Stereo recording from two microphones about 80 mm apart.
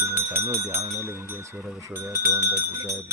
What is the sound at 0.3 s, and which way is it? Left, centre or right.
Speech, right.